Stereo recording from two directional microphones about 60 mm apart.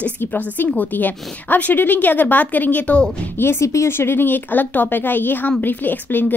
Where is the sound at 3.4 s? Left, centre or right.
Left.